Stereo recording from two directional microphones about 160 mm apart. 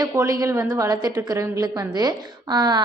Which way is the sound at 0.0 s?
15° right (ahead or behind).